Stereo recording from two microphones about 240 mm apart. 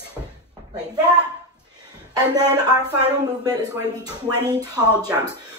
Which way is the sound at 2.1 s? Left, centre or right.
Centre.